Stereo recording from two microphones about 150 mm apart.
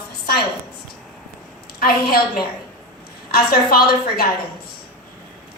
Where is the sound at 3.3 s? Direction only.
85° left.